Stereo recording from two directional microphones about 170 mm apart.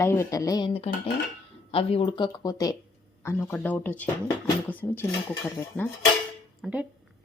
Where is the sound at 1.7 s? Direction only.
35° left (ahead or behind); by 5.9 s 10° left (ahead or behind).